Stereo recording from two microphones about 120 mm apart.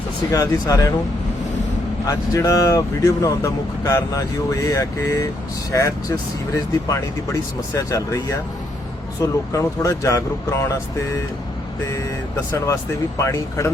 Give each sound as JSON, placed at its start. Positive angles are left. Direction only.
{"t": 0.3, "sound": "speech", "side_deg": 30}
{"t": 2.0, "sound": "speech", "side_deg": 30}
{"t": 9.5, "sound": "speech", "side_deg": 25}
{"t": 12.5, "sound": "speech", "side_deg": 25}